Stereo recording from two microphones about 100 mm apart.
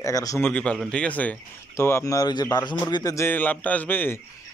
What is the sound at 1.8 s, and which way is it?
Speech, 25° left (ahead or behind).